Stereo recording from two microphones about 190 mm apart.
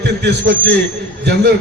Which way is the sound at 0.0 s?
65° right (ahead or behind).